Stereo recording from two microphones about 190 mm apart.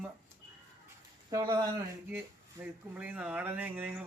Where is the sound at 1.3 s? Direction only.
20° right (ahead or behind).